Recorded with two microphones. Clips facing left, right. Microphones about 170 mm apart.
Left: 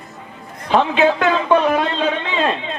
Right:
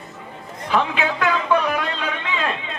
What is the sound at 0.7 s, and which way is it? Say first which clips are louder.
A man's voice: left 6 dB; 25° left (ahead or behind).